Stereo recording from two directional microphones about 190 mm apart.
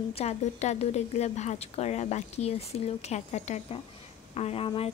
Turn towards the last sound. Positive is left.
turn(degrees=30)  # may be behind; listen again after turning